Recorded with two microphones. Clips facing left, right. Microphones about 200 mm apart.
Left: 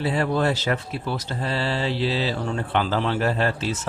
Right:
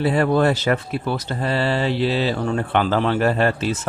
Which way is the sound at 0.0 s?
55° right (ahead or behind).